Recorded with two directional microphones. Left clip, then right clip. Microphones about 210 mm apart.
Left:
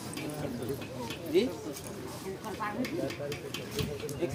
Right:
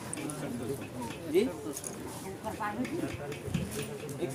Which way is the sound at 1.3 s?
Centre (ahead or behind).